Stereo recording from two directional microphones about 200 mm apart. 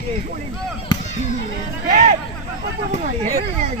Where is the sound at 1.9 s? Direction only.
35° right (ahead or behind).